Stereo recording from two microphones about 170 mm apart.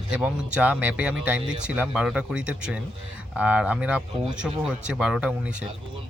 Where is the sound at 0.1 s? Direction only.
5° right (ahead or behind).